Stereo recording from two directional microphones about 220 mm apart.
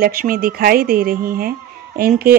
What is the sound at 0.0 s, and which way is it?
Speech, 40° right (ahead or behind).